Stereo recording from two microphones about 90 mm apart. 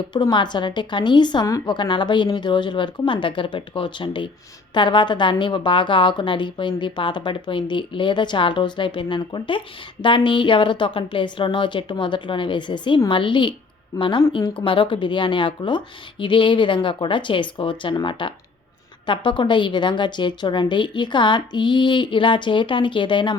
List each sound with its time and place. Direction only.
0.1 s a woman's voice: 55° left (ahead or behind)